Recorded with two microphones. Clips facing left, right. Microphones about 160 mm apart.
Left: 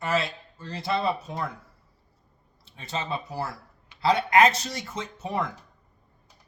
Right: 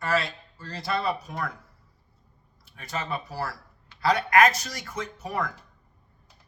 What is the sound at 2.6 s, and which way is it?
Speech, 25° left (ahead or behind).